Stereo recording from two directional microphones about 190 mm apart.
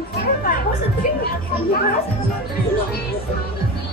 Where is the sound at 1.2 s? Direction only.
50° left (ahead or behind).